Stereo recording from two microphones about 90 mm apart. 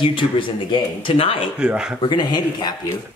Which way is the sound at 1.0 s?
90° left.